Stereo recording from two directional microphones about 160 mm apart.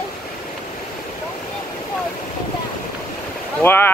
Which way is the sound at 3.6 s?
15° left (ahead or behind).